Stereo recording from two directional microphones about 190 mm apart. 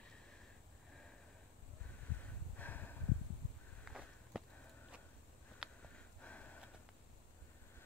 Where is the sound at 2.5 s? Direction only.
10° left (ahead or behind).